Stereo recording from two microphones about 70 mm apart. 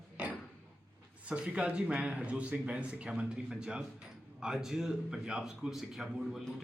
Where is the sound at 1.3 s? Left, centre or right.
Centre.